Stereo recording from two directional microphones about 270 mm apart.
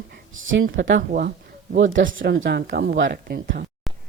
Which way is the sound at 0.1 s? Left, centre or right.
Right.